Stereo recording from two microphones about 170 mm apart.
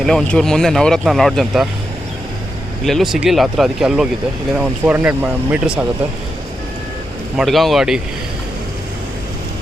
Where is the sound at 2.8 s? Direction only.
Centre (ahead or behind).